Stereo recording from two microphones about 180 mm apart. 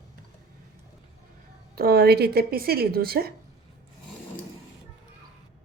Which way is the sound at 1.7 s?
60° right (ahead or behind).